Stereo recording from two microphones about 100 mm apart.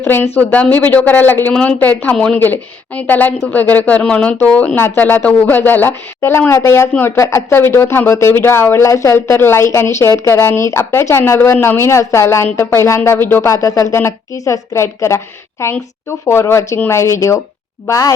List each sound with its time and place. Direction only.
0.0 s a woman's voice: 25° left (ahead or behind)